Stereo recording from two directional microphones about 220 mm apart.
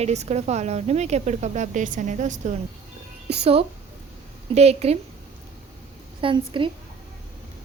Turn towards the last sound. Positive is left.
turn(degrees=-20)  # may be behind; listen again after turning